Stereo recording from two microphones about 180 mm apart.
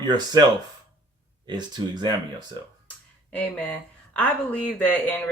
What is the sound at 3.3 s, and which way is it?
Speech, 5° left (ahead or behind).